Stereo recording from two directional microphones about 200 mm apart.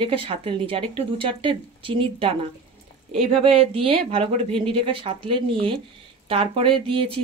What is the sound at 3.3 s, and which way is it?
Speech, 30° right (ahead or behind).